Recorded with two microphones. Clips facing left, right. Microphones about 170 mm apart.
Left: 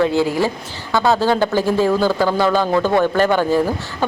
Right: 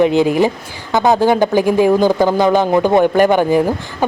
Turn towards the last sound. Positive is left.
turn(degrees=-15)  # may be behind; listen again after turning